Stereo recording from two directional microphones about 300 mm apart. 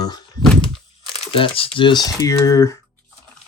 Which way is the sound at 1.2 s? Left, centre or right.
Centre.